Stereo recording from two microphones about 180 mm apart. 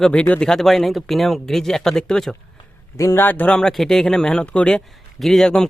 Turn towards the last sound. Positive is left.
turn(degrees=5)  # may be behind; listen again after turning